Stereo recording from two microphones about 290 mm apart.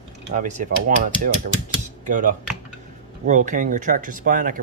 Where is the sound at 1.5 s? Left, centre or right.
Right.